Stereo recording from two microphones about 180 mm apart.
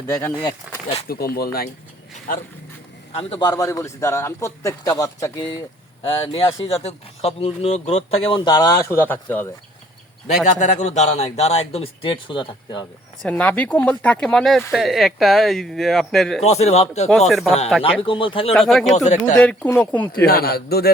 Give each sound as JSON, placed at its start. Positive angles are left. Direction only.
{"t": 0.1, "sound": "a man's voice", "side_deg": 15}
{"t": 1.0, "sound": "speech", "side_deg": 60}
{"t": 3.1, "sound": "a man's voice", "side_deg": 30}
{"t": 6.1, "sound": "speech", "side_deg": 30}
{"t": 10.2, "sound": "a man's voice", "side_deg": 40}
{"t": 13.2, "sound": "speech", "side_deg": 10}
{"t": 16.4, "sound": "a man's voice", "side_deg": 35}
{"t": 17.1, "sound": "speech", "side_deg": 0}
{"t": 18.0, "sound": "speech", "side_deg": 30}
{"t": 18.5, "sound": "speech", "side_deg": 0}
{"t": 18.9, "sound": "a man's voice", "side_deg": 40}
{"t": 19.4, "sound": "a man's voice", "side_deg": 5}
{"t": 20.2, "sound": "speech", "side_deg": 60}